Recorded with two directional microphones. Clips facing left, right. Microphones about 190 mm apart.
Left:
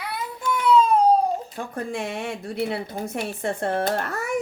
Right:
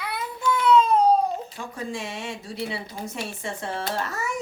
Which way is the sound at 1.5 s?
55° left (ahead or behind).